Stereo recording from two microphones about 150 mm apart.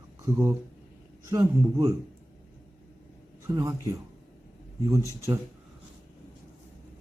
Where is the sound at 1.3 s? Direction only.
25° right (ahead or behind).